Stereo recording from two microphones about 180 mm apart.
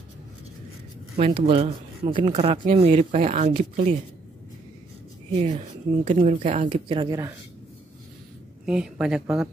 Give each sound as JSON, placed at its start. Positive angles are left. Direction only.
{"t": 1.1, "sound": "speech", "side_deg": -35}
{"t": 2.1, "sound": "speech", "side_deg": -45}
{"t": 2.5, "sound": "speech", "side_deg": -30}
{"t": 2.9, "sound": "speech", "side_deg": -40}
{"t": 5.3, "sound": "speech", "side_deg": -35}
{"t": 6.7, "sound": "speech", "side_deg": -25}
{"t": 8.6, "sound": "speech", "side_deg": -5}